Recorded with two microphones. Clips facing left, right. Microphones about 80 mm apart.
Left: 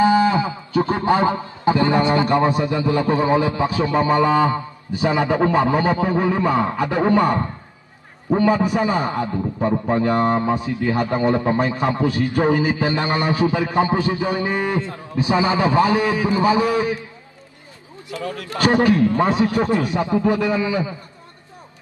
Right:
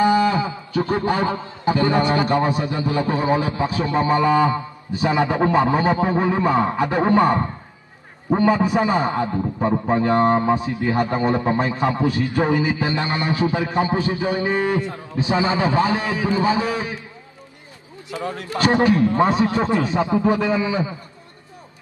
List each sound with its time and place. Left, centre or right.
0.0 s a sound: left
2.3 s a man's voice: left
3.9 s a man's voice: right
4.2 s a man's voice: left
4.9 s a man's voice: right
12.4 s a man's voice: left
14.8 s a man's voice: right
15.2 s a man's voice: left
15.8 s a man's voice: right
16.1 s a man's voice: left
16.4 s a man's voice: right
18.1 s a man's voice: right